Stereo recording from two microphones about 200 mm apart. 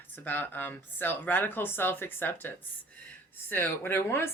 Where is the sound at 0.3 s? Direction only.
10° left (ahead or behind).